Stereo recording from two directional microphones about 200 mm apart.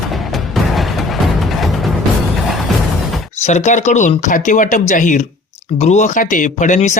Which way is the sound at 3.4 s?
35° left (ahead or behind).